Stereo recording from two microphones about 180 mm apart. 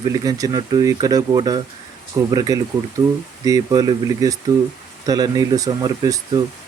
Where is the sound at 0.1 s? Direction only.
20° right (ahead or behind).